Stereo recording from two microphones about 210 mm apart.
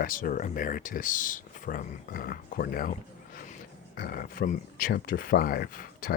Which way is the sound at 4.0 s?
45° left (ahead or behind).